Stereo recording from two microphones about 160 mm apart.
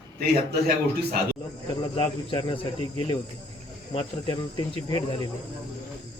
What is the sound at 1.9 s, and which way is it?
Speech, 35° left (ahead or behind).